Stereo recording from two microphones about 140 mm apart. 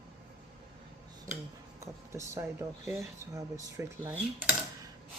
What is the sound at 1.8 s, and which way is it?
Speech, 20° right (ahead or behind).